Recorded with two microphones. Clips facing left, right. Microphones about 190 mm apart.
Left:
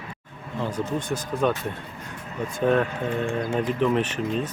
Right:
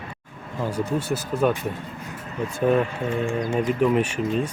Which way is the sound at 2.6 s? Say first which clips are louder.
Right 1 dB; 5° right (ahead or behind).